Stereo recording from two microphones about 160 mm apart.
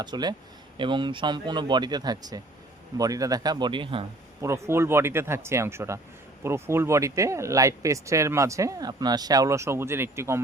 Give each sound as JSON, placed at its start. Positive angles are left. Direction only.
{"t": 0.0, "sound": "speech", "side_deg": -25}
{"t": 4.4, "sound": "speech", "side_deg": -20}